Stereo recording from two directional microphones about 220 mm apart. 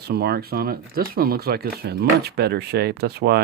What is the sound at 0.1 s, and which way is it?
Speech, 45° right (ahead or behind).